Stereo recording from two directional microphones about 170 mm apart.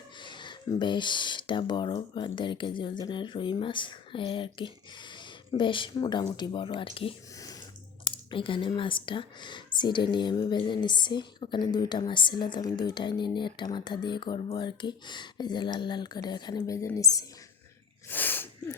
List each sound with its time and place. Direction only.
0.2 s speech: 30° left (ahead or behind)
7.3 s water: 20° left (ahead or behind)
8.0 s speech: 30° left (ahead or behind)
18.1 s sneeze: 10° left (ahead or behind)